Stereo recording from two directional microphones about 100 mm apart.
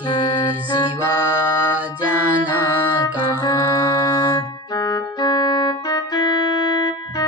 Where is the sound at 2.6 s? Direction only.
40° left (ahead or behind).